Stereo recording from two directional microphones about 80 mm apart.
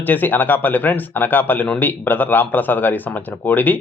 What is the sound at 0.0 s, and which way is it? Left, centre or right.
Speech, left.